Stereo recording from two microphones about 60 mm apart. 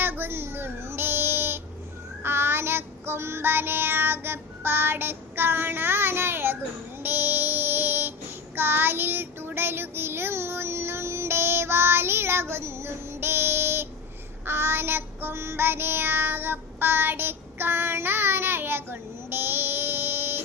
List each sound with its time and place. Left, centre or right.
0.0 s a sound: right
2.2 s child singing: right
7.0 s music: right
8.5 s child singing: right